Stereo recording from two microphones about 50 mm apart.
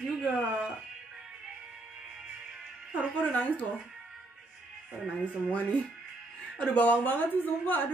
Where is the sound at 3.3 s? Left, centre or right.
Left.